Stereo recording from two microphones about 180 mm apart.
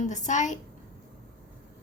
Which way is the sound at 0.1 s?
40° left (ahead or behind).